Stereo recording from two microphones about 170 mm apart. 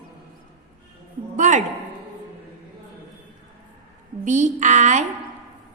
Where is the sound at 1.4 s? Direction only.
45° right (ahead or behind).